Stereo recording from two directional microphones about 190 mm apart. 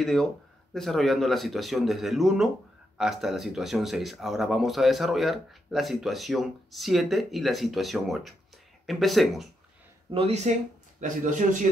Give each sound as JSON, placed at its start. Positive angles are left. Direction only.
{"t": 0.0, "sound": "speech", "side_deg": 0}
{"t": 10.1, "sound": "speech", "side_deg": -35}